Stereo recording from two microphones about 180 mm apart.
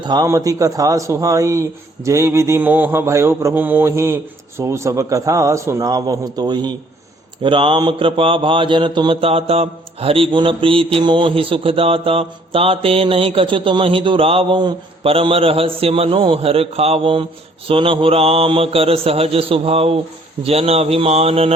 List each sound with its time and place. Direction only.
0.0 s a man's voice: 25° right (ahead or behind)
2.0 s mantra: 15° right (ahead or behind); by 21.5 s 35° right (ahead or behind)